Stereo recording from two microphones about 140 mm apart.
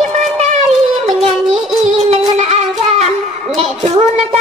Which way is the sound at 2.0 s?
55° right (ahead or behind).